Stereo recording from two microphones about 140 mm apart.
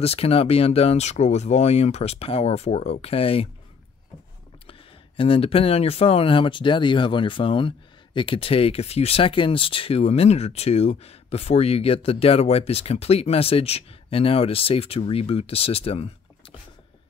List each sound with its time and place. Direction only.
0.0 s speech: 45° left (ahead or behind)
4.6 s speech: 40° left (ahead or behind)